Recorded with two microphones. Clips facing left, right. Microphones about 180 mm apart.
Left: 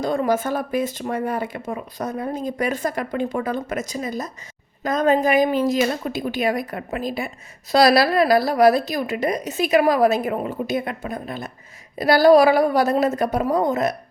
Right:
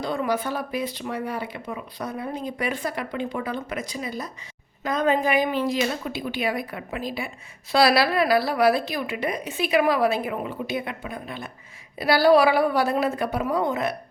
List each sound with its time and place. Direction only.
0.0 s a woman's voice: 45° left (ahead or behind)